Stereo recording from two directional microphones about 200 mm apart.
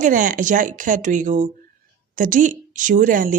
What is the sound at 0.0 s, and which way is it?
A woman's voice, 40° right (ahead or behind).